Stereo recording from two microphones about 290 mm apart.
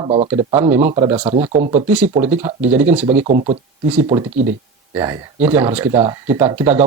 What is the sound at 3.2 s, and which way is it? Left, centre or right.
Speech, right.